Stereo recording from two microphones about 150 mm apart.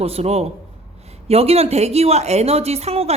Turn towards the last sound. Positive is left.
turn(degrees=-45)  # may be behind; listen again after turning